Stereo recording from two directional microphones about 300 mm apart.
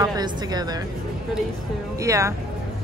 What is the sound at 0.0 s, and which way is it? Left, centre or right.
Speech, centre.